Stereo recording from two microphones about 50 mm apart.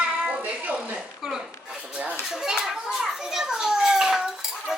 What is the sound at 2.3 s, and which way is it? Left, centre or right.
Children playing, centre.